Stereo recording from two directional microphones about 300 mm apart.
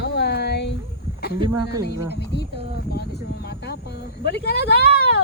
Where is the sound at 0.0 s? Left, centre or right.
Left.